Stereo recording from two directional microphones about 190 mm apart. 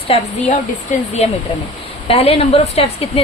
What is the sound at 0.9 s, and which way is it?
A woman's voice, 40° left (ahead or behind).